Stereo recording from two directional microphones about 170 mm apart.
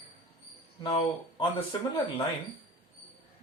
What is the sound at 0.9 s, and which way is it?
Speech, 30° left (ahead or behind).